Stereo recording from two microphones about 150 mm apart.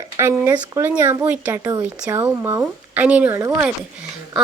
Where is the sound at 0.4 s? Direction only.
15° right (ahead or behind).